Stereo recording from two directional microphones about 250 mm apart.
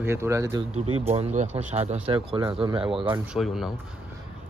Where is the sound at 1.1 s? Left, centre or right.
Right.